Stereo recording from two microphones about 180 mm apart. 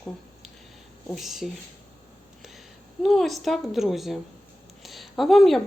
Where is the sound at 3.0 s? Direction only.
Centre (ahead or behind).